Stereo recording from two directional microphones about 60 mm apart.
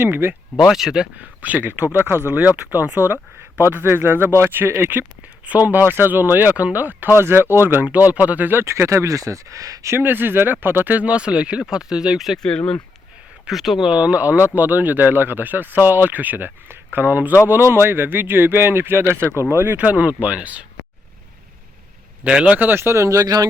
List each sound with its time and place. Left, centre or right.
0.0 s speech: right
0.7 s speech: centre
1.2 s speech: right
3.8 s speech: right
7.2 s speech: right
8.6 s speech: right
9.9 s speech: right; by 12.4 s centre
12.4 s speech: centre
13.5 s speech: centre
13.8 s speech: centre; by 19.7 s right
19.7 s speech: right
22.2 s speech: centre
22.5 s speech: right
22.8 s speech: right